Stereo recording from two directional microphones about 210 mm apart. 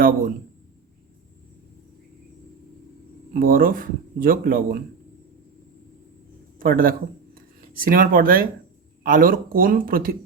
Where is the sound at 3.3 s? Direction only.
45° right (ahead or behind).